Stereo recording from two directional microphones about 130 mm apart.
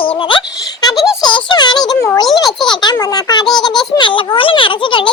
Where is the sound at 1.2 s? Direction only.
40° left (ahead or behind).